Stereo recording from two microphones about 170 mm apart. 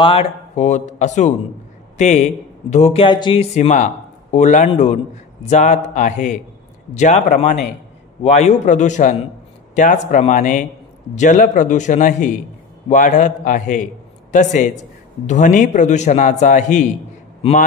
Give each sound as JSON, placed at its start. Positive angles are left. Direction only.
{"t": 0.0, "sound": "a man's voice", "side_deg": 35}
{"t": 3.5, "sound": "a man's voice", "side_deg": 45}